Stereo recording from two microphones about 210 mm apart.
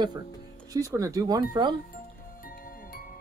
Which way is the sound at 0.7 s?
15° right (ahead or behind).